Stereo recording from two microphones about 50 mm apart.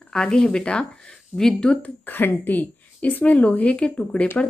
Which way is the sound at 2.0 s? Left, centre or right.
Left.